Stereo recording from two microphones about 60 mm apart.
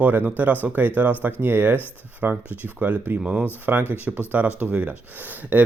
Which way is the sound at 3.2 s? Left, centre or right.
Centre.